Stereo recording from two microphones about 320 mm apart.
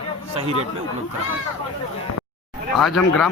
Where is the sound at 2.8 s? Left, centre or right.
Centre.